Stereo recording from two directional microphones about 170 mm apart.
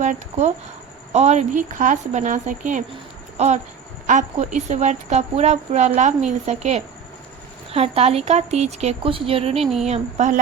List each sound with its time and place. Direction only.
0.0 s speech: 45° right (ahead or behind)